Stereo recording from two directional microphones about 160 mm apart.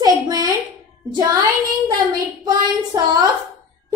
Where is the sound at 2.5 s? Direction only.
25° right (ahead or behind).